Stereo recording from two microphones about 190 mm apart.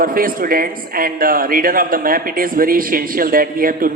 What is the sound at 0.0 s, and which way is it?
Speech, 50° right (ahead or behind).